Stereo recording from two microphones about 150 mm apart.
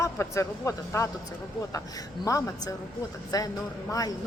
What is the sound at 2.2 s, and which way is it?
A woman's voice, 20° left (ahead or behind).